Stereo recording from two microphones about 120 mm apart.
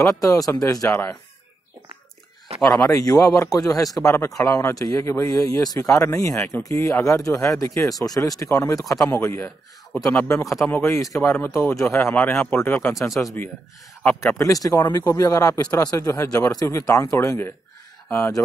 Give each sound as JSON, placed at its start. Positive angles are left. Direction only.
{"t": 0.0, "sound": "a man's voice", "side_deg": 25}
{"t": 2.9, "sound": "a man's voice", "side_deg": 30}
{"t": 14.2, "sound": "a man's voice", "side_deg": 30}